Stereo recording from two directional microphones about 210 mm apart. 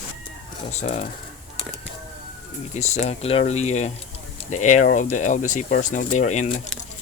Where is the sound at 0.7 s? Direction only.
35° left (ahead or behind).